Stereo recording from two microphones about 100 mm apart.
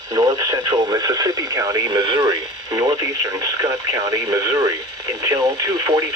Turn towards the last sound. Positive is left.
turn(degrees=-35)  # may be behind; listen again after turning